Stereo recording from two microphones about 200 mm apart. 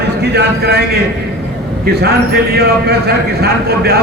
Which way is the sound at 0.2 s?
55° right (ahead or behind).